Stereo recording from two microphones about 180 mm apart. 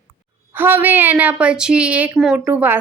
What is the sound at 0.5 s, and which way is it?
A woman's voice, 10° right (ahead or behind).